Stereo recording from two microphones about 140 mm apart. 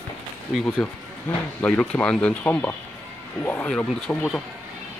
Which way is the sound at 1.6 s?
10° left (ahead or behind).